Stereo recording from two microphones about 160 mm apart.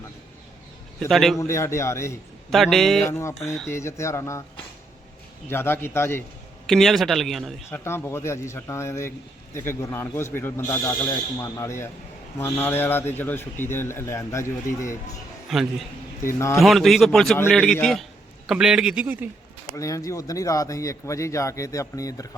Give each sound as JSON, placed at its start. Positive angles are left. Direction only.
{"t": 0.9, "sound": "a man's voice", "side_deg": 0}
{"t": 1.4, "sound": "a man's voice", "side_deg": 15}
{"t": 2.5, "sound": "a man's voice", "side_deg": 0}
{"t": 3.1, "sound": "a man's voice", "side_deg": 15}
{"t": 5.5, "sound": "a man's voice", "side_deg": 15}
{"t": 6.7, "sound": "a man's voice", "side_deg": 0}
{"t": 7.7, "sound": "a man's voice", "side_deg": 15}
{"t": 15.5, "sound": "a man's voice", "side_deg": 0}
{"t": 16.2, "sound": "a man's voice", "side_deg": 15}
{"t": 16.6, "sound": "a man's voice", "side_deg": 0}
{"t": 19.7, "sound": "speech", "side_deg": 20}